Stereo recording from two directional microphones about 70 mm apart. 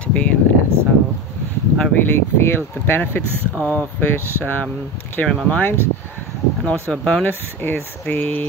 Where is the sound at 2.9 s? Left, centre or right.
Left.